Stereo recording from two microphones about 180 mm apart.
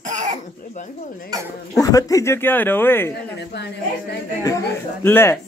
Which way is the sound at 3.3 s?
70° left (ahead or behind).